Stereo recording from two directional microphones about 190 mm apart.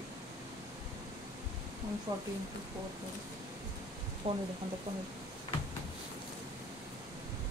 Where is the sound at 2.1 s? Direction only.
15° right (ahead or behind).